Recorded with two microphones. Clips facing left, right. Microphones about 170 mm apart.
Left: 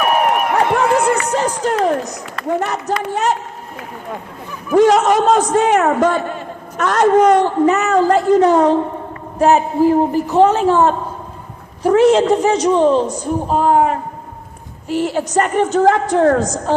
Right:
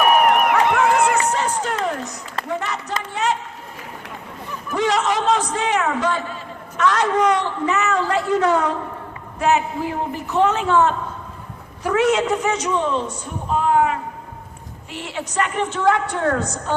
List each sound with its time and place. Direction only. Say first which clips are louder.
0.5 s crowd: left 2 dB; 35° left (ahead or behind)
1.3 s a man's voice: left 5 dB; 40° left (ahead or behind)
4.7 s a man's voice: left 9 dB; 45° left (ahead or behind)